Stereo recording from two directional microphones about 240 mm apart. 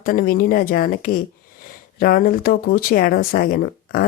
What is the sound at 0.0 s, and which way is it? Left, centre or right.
Speech, left.